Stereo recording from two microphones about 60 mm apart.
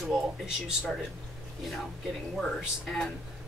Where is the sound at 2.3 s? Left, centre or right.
Centre.